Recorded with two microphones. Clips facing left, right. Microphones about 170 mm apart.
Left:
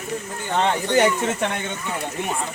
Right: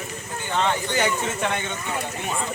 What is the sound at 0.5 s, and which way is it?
Speech, 50° left (ahead or behind).